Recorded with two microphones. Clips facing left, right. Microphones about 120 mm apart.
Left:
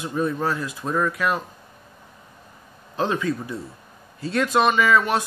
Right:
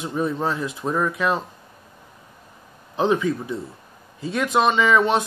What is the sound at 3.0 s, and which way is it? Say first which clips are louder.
Speech: right 3 dB; 15° right (ahead or behind).